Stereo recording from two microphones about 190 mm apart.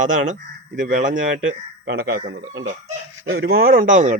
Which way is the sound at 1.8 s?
55° right (ahead or behind).